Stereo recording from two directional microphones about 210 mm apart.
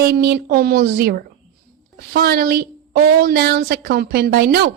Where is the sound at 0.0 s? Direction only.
45° right (ahead or behind).